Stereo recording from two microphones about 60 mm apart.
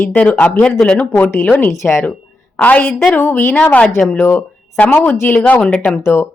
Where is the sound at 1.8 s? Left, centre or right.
Centre; by 3.4 s left.